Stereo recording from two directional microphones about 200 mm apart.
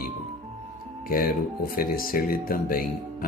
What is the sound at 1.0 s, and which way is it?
Speech, 45° left (ahead or behind).